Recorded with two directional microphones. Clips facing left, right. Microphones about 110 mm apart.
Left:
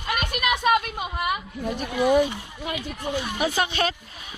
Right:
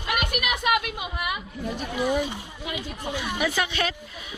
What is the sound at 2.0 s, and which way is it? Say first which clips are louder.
Speech: left 6 dB; 60° left (ahead or behind).